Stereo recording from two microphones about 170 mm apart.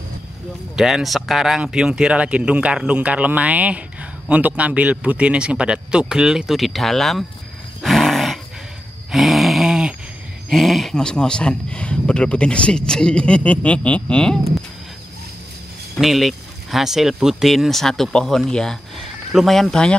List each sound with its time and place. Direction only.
0.7 s speech: centre (ahead or behind)
7.8 s roar: centre (ahead or behind)
9.1 s a sound: centre (ahead or behind)
10.5 s speech: centre (ahead or behind)
16.0 s speech: centre (ahead or behind)